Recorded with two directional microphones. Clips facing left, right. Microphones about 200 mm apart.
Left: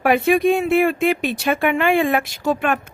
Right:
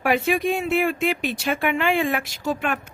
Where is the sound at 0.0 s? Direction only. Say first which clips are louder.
Left 5 dB; 55° left (ahead or behind).